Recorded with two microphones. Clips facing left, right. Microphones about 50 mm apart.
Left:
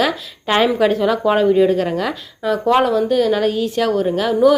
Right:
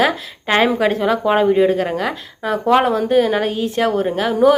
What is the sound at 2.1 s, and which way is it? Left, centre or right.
A woman's voice, right.